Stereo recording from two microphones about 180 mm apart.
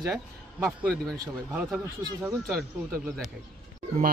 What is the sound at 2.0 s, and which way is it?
Speech, 20° right (ahead or behind).